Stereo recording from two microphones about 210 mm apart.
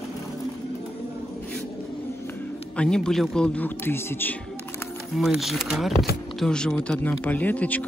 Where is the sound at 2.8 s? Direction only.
5° left (ahead or behind).